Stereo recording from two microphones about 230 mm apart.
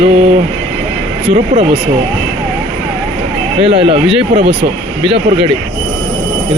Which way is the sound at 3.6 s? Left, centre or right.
Right.